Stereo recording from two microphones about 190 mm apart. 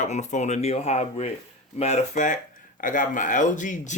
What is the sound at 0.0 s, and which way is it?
Speech, 40° left (ahead or behind).